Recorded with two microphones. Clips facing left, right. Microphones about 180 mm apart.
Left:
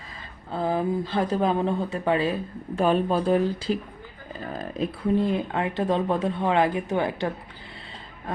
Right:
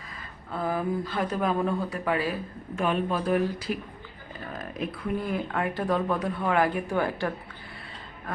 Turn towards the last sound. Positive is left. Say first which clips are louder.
# left 2 dB
turn(degrees=20)  # may be behind; listen again after turning